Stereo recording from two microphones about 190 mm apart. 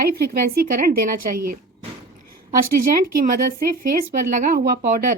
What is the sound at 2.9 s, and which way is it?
A woman's voice, 45° right (ahead or behind).